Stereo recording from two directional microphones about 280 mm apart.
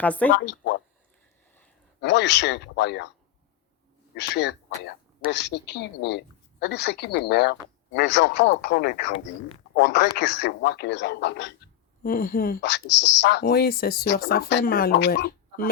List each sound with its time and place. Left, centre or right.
0.0 s speech: centre
0.3 s speech: left
2.0 s speech: left
4.1 s speech: left